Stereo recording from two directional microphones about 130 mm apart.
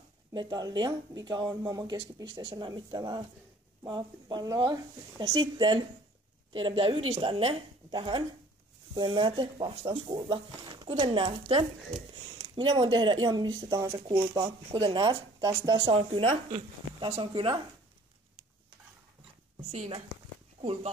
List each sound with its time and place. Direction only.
0.3 s speech: 35° right (ahead or behind)
14.8 s speech: 35° right (ahead or behind)
15.9 s a woman's voice: 45° right (ahead or behind)